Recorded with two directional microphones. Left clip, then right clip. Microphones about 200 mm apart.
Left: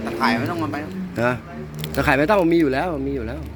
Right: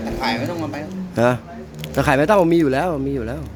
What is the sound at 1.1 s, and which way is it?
A man's voice, 40° right (ahead or behind).